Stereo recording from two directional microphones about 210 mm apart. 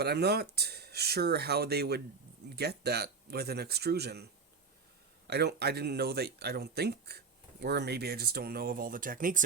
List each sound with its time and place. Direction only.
0.0 s speech: 50° right (ahead or behind)
5.3 s speech: 50° right (ahead or behind)